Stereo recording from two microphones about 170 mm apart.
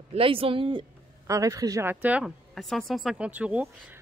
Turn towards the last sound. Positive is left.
turn(degrees=-10)  # may be behind; listen again after turning